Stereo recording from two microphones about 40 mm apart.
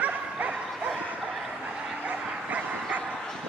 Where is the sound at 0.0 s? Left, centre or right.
Right.